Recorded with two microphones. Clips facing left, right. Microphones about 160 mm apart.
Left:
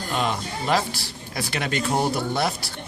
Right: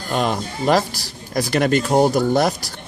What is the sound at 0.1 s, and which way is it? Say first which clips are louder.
Speech: right 5 dB; 45° right (ahead or behind).